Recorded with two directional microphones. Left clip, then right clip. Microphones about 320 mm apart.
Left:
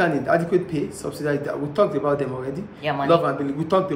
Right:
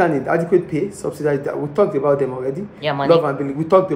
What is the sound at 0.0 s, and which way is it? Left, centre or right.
A man's voice, centre.